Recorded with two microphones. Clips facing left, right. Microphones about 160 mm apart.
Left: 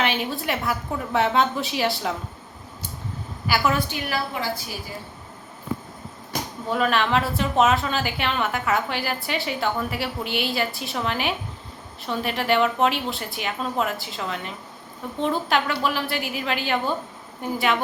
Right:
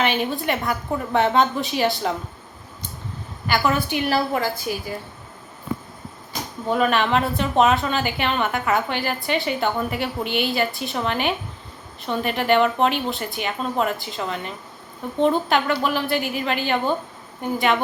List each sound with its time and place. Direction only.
0.0 s a woman's voice: centre (ahead or behind)
3.4 s a woman's voice: 5° left (ahead or behind)
4.1 s a woman's voice: 50° right (ahead or behind)
6.7 s a woman's voice: centre (ahead or behind)